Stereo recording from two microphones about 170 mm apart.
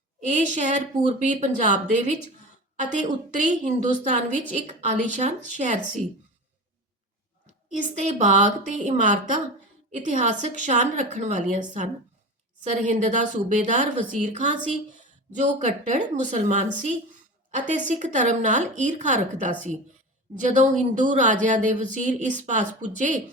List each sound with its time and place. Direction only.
0.3 s speech: 45° right (ahead or behind)
7.7 s speech: 45° right (ahead or behind)